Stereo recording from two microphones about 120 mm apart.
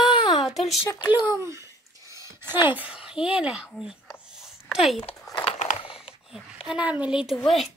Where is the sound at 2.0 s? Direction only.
25° right (ahead or behind); by 5.0 s centre (ahead or behind).